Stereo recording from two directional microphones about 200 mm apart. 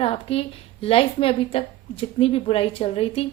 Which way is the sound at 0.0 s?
30° left (ahead or behind).